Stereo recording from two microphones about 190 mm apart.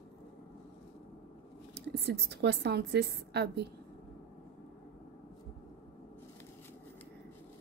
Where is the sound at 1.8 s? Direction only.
60° right (ahead or behind).